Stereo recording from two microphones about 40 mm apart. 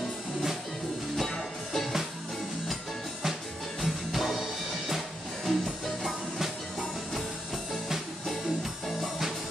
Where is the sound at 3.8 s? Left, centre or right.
Centre.